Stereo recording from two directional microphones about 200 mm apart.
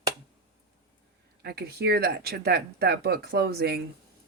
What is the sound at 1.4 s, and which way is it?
Speech, 55° right (ahead or behind).